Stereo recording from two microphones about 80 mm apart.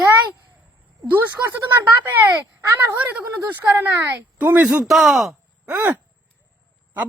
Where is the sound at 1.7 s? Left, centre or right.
Right.